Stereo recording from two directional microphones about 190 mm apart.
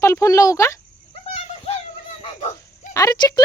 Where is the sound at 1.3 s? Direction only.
30° left (ahead or behind).